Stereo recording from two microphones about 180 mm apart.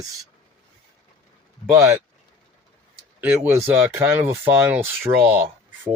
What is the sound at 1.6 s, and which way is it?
Speech, 30° left (ahead or behind).